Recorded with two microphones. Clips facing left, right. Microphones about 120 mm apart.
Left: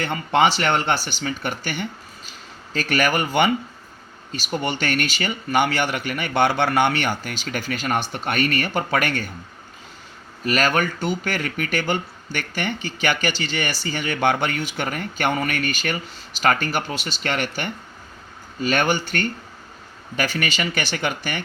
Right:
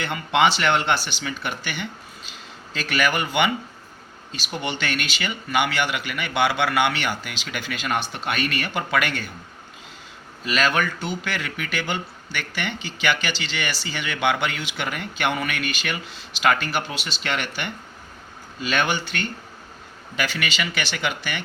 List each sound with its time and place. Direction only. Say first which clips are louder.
0.0 s speech: left 1 dB; 40° left (ahead or behind)
10.4 s speech: left 2 dB; 45° left (ahead or behind)